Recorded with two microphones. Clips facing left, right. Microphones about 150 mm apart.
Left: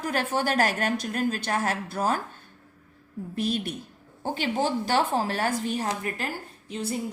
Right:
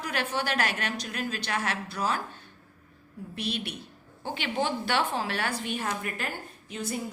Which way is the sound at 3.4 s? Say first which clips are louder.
Left 6 dB; 45° left (ahead or behind).